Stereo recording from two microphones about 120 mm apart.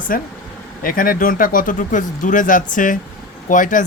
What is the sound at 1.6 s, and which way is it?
Speech, 90° left.